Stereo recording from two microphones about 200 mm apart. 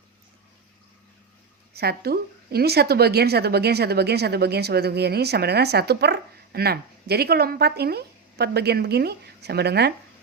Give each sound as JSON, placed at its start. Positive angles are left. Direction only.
{"t": 1.7, "sound": "a woman's voice", "side_deg": -50}